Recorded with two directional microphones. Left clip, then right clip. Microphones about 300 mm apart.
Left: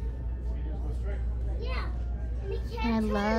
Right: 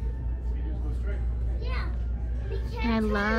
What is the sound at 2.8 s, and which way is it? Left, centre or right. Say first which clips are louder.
Speech: right 2 dB; centre.